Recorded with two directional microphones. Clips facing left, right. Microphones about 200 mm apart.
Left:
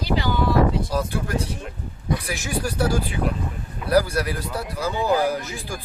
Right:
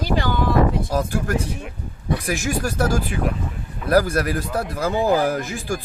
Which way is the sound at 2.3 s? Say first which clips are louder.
Right 4 dB; 45° right (ahead or behind).